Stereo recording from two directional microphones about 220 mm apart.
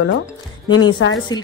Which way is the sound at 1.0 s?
65° left (ahead or behind).